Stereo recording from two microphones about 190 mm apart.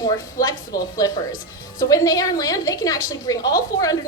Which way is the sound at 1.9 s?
20° left (ahead or behind).